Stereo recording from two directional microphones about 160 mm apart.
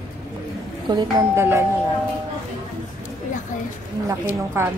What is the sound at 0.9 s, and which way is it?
Speech, 25° right (ahead or behind).